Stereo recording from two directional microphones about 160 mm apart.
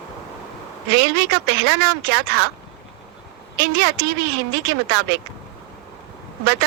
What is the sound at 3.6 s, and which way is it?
Speech, 90° right.